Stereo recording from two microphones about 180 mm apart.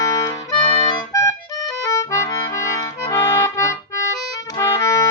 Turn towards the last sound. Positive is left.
turn(degrees=15)  # may be behind; listen again after turning